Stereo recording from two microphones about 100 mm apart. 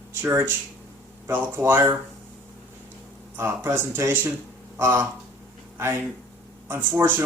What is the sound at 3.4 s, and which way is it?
Speech, 25° right (ahead or behind).